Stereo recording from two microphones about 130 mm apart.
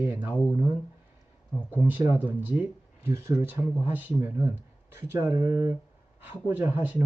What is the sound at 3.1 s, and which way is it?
Speech, 25° right (ahead or behind).